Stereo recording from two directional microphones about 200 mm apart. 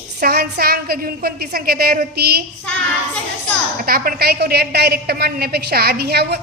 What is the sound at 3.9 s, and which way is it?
A woman's voice, 50° right (ahead or behind).